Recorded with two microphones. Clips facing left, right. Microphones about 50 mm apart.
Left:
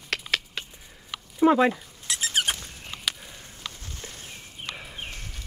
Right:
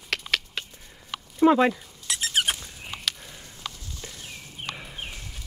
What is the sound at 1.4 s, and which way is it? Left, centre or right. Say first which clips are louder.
Speech: right 1 dB; centre.